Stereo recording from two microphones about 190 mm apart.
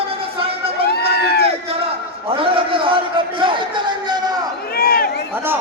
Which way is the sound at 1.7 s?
30° right (ahead or behind).